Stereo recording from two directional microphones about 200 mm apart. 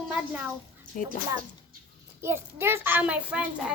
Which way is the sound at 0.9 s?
45° left (ahead or behind).